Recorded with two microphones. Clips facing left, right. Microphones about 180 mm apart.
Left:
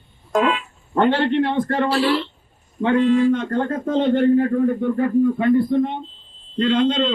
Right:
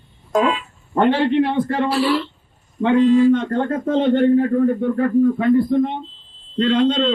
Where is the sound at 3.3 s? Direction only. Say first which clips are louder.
Right 2 dB; centre (ahead or behind).